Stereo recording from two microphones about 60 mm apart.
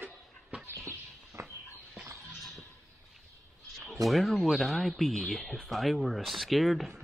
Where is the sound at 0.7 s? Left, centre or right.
Right.